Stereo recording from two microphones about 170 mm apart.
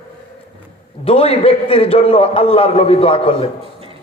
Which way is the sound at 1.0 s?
35° left (ahead or behind).